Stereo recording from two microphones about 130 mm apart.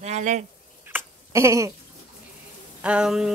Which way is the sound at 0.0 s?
65° right (ahead or behind).